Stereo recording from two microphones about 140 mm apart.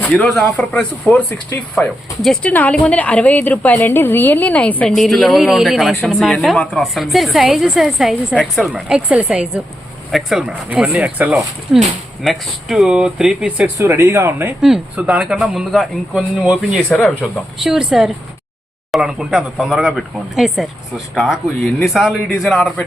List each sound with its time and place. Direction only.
0.0 s a man's voice: 10° left (ahead or behind)
8.7 s a man's voice: 10° right (ahead or behind)
13.7 s speech: 20° right (ahead or behind)
14.6 s a man's voice: 5° right (ahead or behind)